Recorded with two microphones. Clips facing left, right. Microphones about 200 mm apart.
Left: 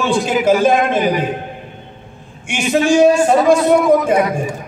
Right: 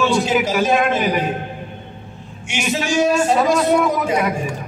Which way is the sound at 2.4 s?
55° left (ahead or behind).